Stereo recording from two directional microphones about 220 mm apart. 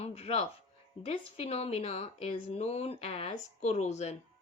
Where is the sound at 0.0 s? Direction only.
25° left (ahead or behind).